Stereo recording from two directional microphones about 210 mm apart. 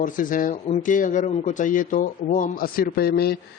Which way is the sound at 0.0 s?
40° left (ahead or behind).